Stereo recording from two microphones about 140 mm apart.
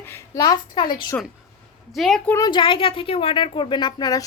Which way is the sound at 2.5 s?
35° left (ahead or behind).